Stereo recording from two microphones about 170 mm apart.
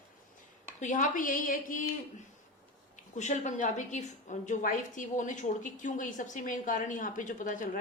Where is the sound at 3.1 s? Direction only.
45° left (ahead or behind).